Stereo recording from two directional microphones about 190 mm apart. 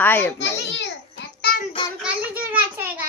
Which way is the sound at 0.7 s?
60° left (ahead or behind).